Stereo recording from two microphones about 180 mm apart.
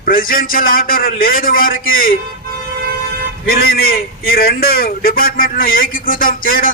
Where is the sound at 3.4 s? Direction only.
55° left (ahead or behind).